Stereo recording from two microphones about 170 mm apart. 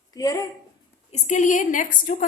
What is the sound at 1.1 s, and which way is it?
A woman's voice, 45° left (ahead or behind).